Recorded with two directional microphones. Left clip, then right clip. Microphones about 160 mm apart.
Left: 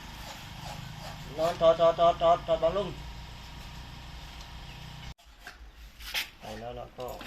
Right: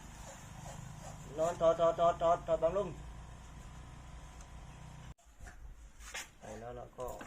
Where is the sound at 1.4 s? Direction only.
Centre (ahead or behind).